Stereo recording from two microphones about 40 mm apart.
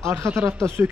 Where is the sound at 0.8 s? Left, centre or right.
Right.